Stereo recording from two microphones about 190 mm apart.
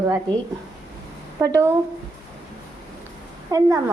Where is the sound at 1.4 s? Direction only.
15° right (ahead or behind).